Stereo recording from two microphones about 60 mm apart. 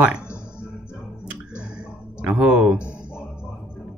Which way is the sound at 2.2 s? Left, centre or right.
Right.